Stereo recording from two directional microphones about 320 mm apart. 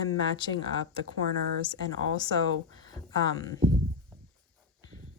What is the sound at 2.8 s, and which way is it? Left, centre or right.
Speech, centre.